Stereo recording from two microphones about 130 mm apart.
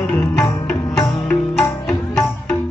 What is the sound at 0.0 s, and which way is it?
Music, 10° left (ahead or behind).